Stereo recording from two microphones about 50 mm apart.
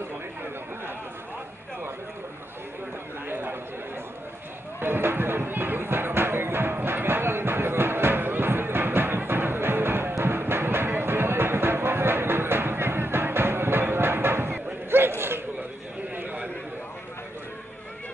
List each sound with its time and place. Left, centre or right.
3.3 s chatter: right
4.7 s a sound: right
10.2 s music: right